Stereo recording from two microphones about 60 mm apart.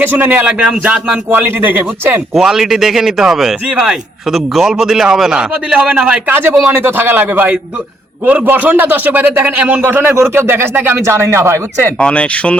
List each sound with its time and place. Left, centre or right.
0.0 s a man's voice: right; by 1.0 s centre
1.3 s speech: right
2.3 s a man's voice: centre
6.2 s speech: right
11.0 s speech: right
11.9 s speech: centre